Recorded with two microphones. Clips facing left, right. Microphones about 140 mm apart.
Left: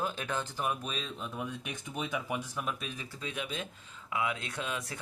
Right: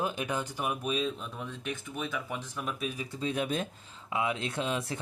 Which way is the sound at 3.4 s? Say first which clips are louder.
Right 6 dB; 45° right (ahead or behind).